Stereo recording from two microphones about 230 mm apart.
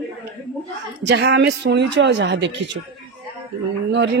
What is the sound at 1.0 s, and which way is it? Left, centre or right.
Speech, right.